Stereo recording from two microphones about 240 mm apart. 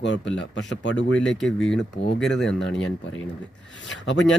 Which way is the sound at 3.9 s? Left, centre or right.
Left.